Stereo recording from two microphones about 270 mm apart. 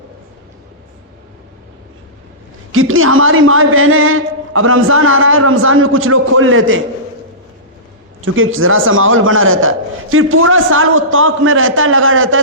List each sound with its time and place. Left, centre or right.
2.7 s a man's voice: right
8.2 s a man's voice: right